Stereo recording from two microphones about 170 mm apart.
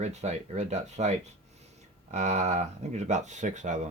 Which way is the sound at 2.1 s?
40° right (ahead or behind).